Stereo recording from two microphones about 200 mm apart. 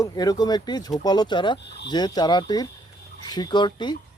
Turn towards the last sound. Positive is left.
turn(degrees=20)  # may be behind; listen again after turning